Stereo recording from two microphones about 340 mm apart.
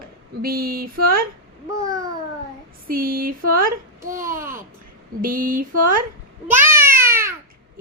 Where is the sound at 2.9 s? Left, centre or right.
Right.